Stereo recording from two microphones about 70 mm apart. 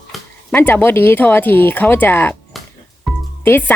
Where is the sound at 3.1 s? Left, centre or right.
Centre.